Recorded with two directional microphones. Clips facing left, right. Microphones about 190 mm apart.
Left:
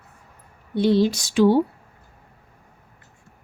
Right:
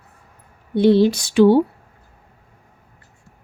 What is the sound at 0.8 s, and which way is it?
Speech, 60° right (ahead or behind).